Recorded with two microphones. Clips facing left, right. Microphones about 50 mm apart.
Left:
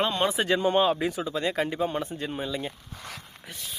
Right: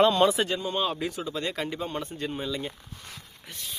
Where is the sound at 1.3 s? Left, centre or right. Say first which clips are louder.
Left 4 dB; centre.